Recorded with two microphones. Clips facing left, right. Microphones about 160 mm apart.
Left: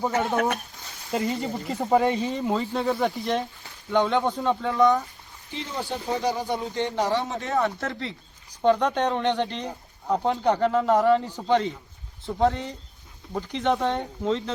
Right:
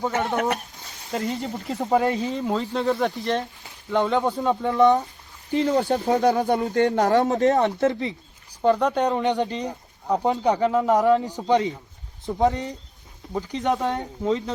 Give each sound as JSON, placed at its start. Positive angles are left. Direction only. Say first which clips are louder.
{"t": 0.1, "sound": "speech", "louder": "even", "side_deg": 0}
{"t": 4.8, "sound": "speech", "louder": "right 3 dB", "side_deg": -30}
{"t": 5.5, "sound": "speech", "louder": "right 11 dB", "side_deg": -50}
{"t": 7.6, "sound": "speech", "louder": "right 6 dB", "side_deg": -20}
{"t": 8.6, "sound": "speech", "louder": "right 1 dB", "side_deg": -5}